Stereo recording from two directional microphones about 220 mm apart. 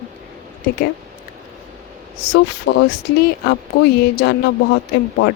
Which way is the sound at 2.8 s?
55° left (ahead or behind).